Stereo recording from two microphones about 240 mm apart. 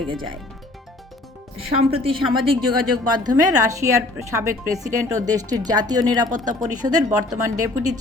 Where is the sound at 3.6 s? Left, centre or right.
Centre.